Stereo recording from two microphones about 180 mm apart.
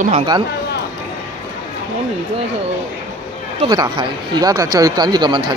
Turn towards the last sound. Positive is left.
turn(degrees=-25)  # may be behind; listen again after turning